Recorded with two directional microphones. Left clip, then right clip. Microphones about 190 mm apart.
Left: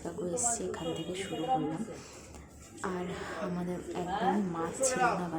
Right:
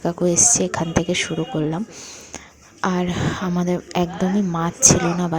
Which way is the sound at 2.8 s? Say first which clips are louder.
Right 14 dB; 40° right (ahead or behind).